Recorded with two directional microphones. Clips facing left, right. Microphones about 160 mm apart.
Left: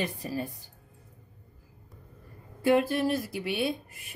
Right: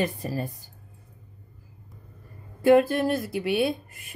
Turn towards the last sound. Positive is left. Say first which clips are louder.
# right 5 dB
turn(degrees=-60)  # may be behind; listen again after turning